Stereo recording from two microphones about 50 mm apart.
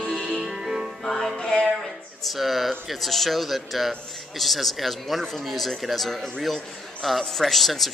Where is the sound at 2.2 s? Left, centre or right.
Centre.